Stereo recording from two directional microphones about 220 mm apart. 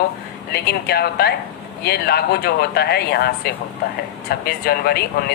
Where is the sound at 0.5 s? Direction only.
45° left (ahead or behind).